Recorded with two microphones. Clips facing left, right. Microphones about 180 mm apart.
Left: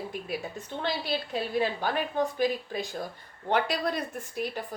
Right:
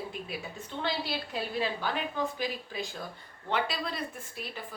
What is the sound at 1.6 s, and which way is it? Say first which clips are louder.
A woman's voice: left 3 dB; 50° left (ahead or behind).